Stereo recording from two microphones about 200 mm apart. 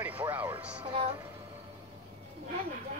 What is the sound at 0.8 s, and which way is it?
Music, 25° right (ahead or behind).